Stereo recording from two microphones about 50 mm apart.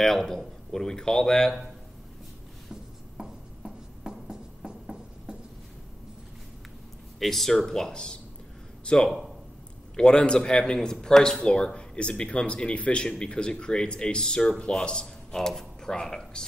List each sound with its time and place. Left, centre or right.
0.0 s speech: centre
2.7 s writing: centre
7.2 s a man's voice: centre